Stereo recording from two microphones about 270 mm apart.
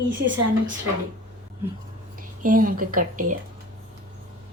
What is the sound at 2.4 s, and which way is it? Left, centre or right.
Speech, right.